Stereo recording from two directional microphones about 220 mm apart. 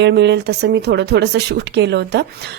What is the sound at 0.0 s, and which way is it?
A woman's voice, 50° right (ahead or behind).